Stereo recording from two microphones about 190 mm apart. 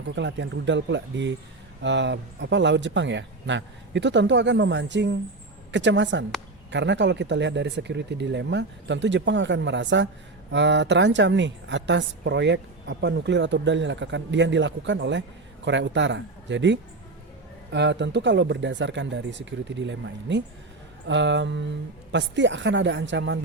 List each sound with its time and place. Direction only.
0.2 s a woman's voice: 70° right (ahead or behind)